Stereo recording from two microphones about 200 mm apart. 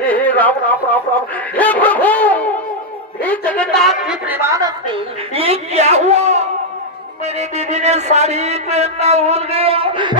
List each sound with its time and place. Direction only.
0.0 s speech: 5° left (ahead or behind)
1.5 s a sound: 10° left (ahead or behind)
3.2 s a woman's voice: 5° left (ahead or behind); by 10.1 s 25° right (ahead or behind)